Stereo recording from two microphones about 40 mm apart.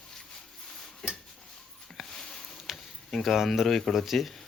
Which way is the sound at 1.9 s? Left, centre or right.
Centre.